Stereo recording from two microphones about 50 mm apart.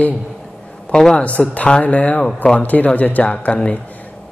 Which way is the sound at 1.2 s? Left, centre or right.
Left.